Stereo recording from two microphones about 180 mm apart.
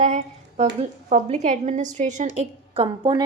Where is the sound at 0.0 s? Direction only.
40° right (ahead or behind).